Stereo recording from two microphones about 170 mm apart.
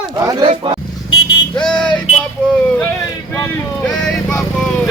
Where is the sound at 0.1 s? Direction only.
20° right (ahead or behind).